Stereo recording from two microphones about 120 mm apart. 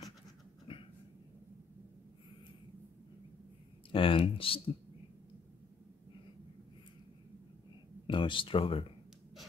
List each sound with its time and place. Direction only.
0.7 s cat: 45° left (ahead or behind)
3.9 s speech: 45° left (ahead or behind)
8.1 s speech: 45° left (ahead or behind)